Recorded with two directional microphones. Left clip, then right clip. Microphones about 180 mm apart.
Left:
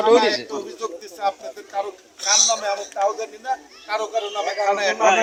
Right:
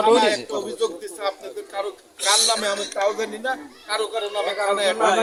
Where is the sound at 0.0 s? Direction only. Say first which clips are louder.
Left 1 dB; 5° right (ahead or behind).